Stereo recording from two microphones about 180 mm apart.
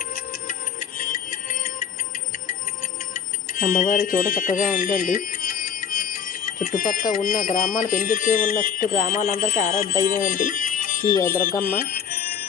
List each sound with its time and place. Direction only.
0.9 s music: 50° left (ahead or behind)
3.6 s speech: 45° left (ahead or behind)
11.8 s music: 55° left (ahead or behind)